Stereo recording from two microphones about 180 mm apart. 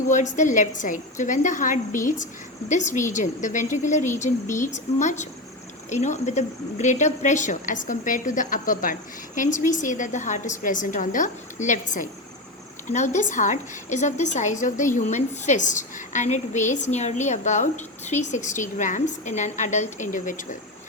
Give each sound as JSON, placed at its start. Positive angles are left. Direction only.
{"t": 0.3, "sound": "speech", "side_deg": 45}